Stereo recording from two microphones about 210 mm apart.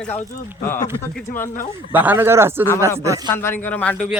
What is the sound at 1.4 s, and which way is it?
Speech, 40° left (ahead or behind).